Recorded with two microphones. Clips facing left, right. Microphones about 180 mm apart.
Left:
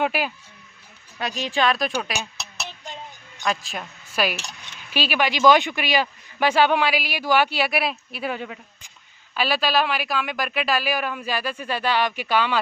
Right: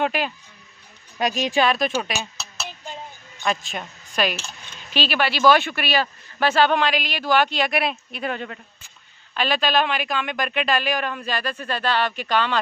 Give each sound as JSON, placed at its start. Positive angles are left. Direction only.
{"t": 0.0, "sound": "cutlery", "side_deg": 5}
{"t": 1.2, "sound": "speech", "side_deg": -15}
{"t": 1.6, "sound": "speech", "side_deg": 0}
{"t": 3.4, "sound": "cutlery", "side_deg": 0}